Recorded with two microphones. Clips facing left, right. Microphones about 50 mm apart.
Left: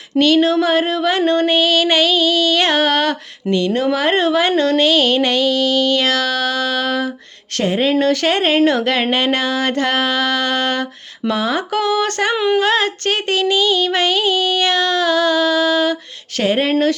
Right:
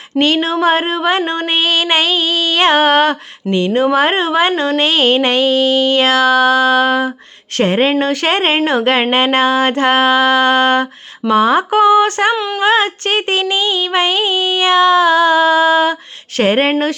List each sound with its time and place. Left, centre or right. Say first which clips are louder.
0.2 s speech: even; right
4.9 s speech: right 2 dB; right
7.6 s speech: right 4 dB; right
7.9 s speech: right 1 dB; right
12.3 s speech: left 1 dB; centre
12.5 s speech: right 3 dB; right
16.4 s speech: right 4 dB; right